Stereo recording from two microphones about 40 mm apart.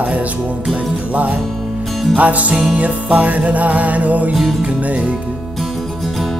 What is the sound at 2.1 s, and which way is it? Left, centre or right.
Music, right.